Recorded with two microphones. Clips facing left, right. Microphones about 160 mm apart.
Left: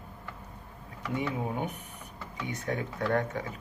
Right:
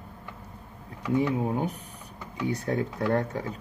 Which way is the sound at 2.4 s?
35° right (ahead or behind).